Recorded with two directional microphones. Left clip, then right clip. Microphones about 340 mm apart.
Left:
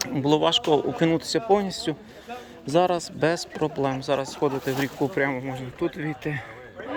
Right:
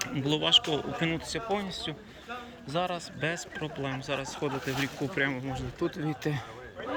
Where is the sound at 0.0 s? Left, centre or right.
Centre.